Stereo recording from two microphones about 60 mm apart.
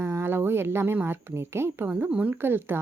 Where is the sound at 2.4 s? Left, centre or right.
Right.